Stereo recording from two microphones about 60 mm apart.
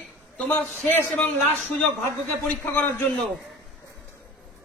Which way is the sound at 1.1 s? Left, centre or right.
Left.